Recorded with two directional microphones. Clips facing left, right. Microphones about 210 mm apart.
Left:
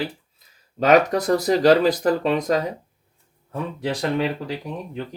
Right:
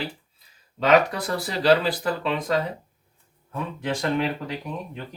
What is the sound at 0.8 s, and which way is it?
Speech, 45° left (ahead or behind).